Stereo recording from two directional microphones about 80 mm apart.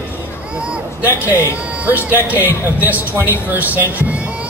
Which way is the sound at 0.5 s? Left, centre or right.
Centre.